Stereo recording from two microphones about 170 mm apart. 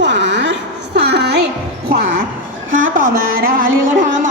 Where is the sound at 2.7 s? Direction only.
55° right (ahead or behind).